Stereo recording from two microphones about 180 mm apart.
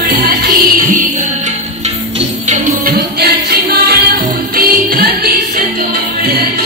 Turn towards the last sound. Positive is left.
turn(degrees=-60)  # may be behind; listen again after turning